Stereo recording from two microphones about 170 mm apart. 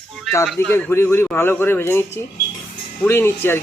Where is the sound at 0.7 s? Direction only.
15° left (ahead or behind).